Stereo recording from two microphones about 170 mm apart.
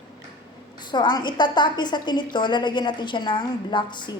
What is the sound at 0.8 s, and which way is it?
A woman's voice, 25° left (ahead or behind).